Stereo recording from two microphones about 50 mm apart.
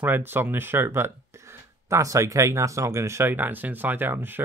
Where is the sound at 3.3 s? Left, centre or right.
Right.